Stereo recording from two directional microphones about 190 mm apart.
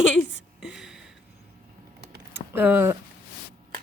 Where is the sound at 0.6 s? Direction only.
5° right (ahead or behind).